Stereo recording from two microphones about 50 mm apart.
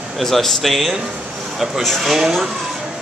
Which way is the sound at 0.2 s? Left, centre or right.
Centre.